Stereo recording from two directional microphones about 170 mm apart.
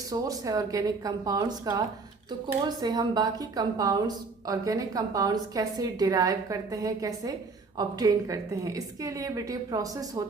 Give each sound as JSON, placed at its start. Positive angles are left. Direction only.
{"t": 0.1, "sound": "a woman's voice", "side_deg": -20}